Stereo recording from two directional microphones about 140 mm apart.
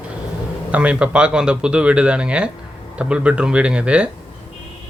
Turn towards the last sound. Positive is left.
turn(degrees=-10)  # may be behind; listen again after turning